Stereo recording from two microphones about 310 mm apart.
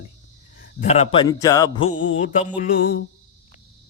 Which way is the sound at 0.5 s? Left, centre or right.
Left.